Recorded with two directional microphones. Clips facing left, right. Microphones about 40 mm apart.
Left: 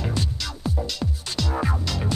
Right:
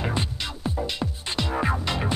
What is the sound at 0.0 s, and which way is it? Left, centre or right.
Music, right.